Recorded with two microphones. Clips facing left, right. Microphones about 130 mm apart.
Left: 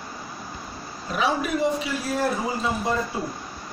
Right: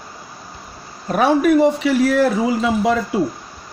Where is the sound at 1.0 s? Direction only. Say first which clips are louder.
Right 10 dB; 55° right (ahead or behind); by 3.0 s 90° right.